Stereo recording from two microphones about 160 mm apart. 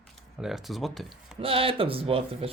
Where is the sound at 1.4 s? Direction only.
35° right (ahead or behind).